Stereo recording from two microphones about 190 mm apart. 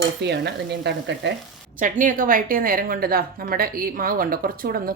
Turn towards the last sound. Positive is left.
turn(degrees=-50)  # may be behind; listen again after turning